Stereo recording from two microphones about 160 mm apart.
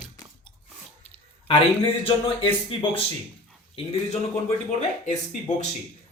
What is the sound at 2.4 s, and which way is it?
Speech, 35° left (ahead or behind).